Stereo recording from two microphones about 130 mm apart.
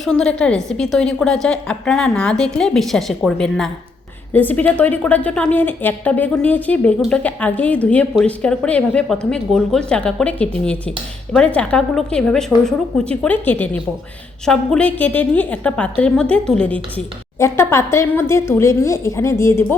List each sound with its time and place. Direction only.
0.0 s a woman's voice: 5° left (ahead or behind)
4.3 s a woman's voice: 15° left (ahead or behind)
17.4 s a woman's voice: 20° left (ahead or behind)